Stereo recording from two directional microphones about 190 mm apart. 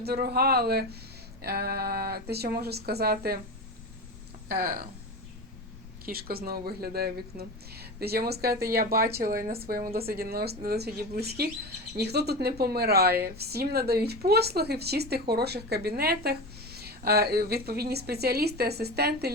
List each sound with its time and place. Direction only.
0.0 s speech: 55° right (ahead or behind)
4.4 s speech: 50° right (ahead or behind)
6.1 s speech: 50° right (ahead or behind)